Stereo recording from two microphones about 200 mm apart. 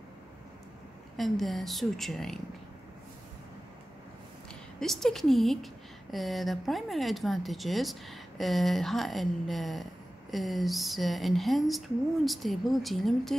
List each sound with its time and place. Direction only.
1.1 s speech: centre (ahead or behind)
4.7 s speech: centre (ahead or behind)